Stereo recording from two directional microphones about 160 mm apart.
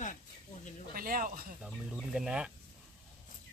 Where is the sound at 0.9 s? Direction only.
65° right (ahead or behind).